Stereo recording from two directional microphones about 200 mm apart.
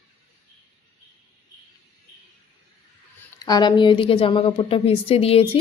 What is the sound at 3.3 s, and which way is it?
A woman's voice, 20° left (ahead or behind).